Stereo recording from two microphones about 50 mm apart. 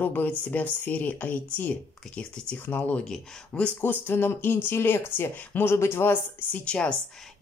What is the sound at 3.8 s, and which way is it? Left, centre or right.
Speech, left.